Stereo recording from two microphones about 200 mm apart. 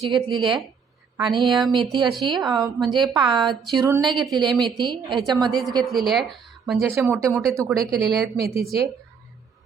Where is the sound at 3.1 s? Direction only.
25° right (ahead or behind).